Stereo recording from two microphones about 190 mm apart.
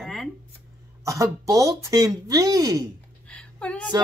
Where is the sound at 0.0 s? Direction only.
Centre (ahead or behind).